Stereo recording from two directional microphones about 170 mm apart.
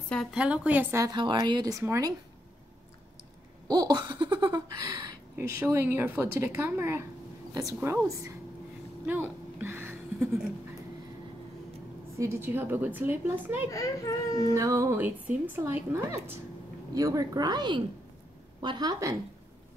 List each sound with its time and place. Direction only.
0.1 s speech: centre (ahead or behind)
1.0 s speech: 25° right (ahead or behind)
3.6 s speech: 25° right (ahead or behind)
5.3 s speech: 15° right (ahead or behind)
9.0 s a sound: 10° right (ahead or behind)
12.2 s speech: 15° right (ahead or behind)
13.7 s speech: 20° left (ahead or behind)
14.5 s speech: 20° right (ahead or behind)